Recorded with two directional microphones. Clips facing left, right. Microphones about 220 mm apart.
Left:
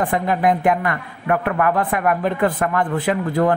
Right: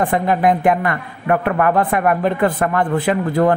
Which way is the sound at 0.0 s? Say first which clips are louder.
Right 3 dB; 30° right (ahead or behind).